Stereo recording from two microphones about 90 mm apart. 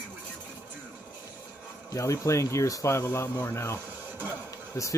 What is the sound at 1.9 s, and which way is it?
Speech, 35° left (ahead or behind).